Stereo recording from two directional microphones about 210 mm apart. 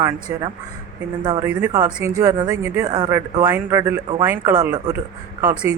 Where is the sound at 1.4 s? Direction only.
5° right (ahead or behind).